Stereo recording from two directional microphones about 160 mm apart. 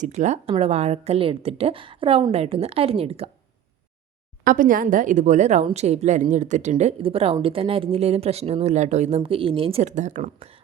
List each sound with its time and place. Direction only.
0.0 s a woman's voice: 50° right (ahead or behind)
4.4 s a woman's voice: 55° right (ahead or behind)